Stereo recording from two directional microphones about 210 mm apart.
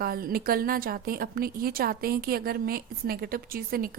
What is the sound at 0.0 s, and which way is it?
A woman's voice, 45° right (ahead or behind).